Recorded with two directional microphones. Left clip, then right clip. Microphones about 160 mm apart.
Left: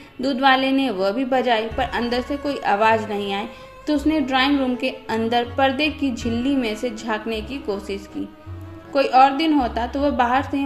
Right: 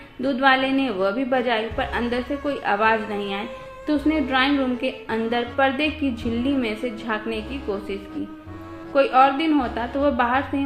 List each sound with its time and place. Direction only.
0.2 s a woman's voice: 45° left (ahead or behind)